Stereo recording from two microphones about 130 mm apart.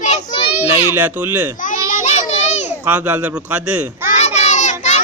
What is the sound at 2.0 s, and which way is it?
Children playing, 60° left (ahead or behind).